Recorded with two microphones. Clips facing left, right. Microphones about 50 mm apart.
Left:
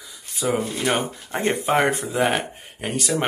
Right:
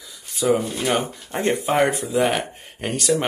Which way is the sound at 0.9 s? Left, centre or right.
Left.